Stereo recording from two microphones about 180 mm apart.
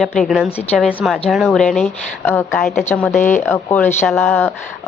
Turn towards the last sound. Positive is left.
turn(degrees=10)  # may be behind; listen again after turning